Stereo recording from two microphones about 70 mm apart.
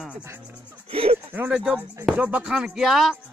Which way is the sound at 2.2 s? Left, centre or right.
Right.